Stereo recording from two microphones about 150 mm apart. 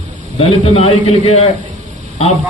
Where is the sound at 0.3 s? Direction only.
45° left (ahead or behind).